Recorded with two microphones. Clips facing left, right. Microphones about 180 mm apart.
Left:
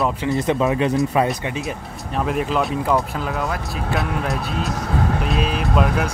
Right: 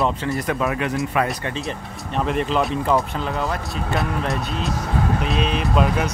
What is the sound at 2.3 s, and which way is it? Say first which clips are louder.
Speech: even; 5° left (ahead or behind).